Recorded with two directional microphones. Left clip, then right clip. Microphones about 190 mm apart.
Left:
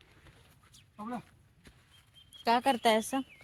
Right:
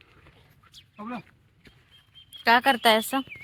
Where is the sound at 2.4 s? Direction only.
10° left (ahead or behind).